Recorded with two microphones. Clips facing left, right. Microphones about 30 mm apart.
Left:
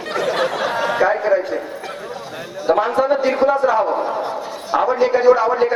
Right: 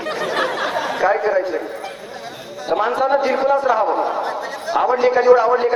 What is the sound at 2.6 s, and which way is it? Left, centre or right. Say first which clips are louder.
A man's voice: left 2 dB; centre.